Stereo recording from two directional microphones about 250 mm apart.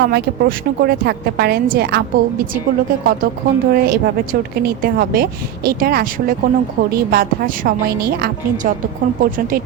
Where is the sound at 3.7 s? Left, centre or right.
Right.